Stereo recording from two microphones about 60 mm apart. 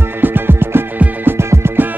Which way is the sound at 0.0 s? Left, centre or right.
Right.